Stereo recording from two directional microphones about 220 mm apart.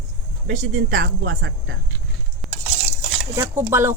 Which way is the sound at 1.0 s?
60° right (ahead or behind).